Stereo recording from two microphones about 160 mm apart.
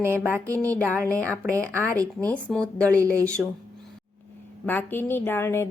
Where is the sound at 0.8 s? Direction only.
10° left (ahead or behind).